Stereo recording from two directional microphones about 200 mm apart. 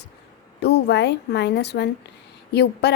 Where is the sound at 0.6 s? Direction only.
55° left (ahead or behind).